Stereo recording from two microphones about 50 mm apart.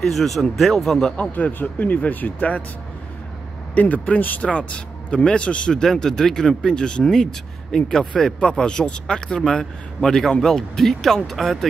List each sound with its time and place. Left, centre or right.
0.0 s speech: centre
1.3 s speech: left
3.7 s speech: left
4.5 s speech: left
5.8 s speech: centre